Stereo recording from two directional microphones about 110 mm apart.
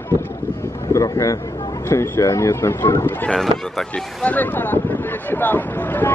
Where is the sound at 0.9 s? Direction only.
30° left (ahead or behind).